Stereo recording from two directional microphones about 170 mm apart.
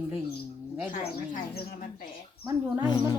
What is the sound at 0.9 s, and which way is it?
Speech, 50° left (ahead or behind).